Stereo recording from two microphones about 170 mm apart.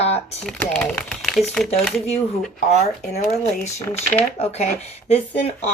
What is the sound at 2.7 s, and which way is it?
Speech, 40° left (ahead or behind).